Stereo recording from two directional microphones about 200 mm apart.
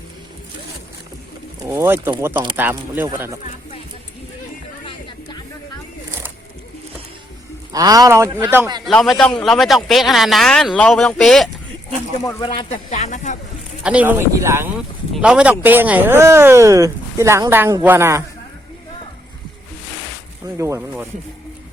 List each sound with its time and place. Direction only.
1.6 s speech: 10° right (ahead or behind)
2.3 s speech: 25° right (ahead or behind)
2.6 s speech: 10° right (ahead or behind)
4.9 s music: 25° left (ahead or behind)
7.7 s speech: 20° right (ahead or behind)
8.8 s speech: centre (ahead or behind)
12.2 s speech: 20° left (ahead or behind)
12.7 s speech: 40° left (ahead or behind)
13.8 s speech: 5° right (ahead or behind)
20.6 s speech: 15° right (ahead or behind)